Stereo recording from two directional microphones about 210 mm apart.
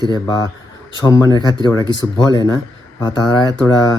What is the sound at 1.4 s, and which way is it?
Speech, 20° right (ahead or behind).